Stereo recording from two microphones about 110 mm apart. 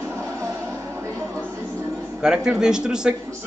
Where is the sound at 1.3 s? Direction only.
25° right (ahead or behind).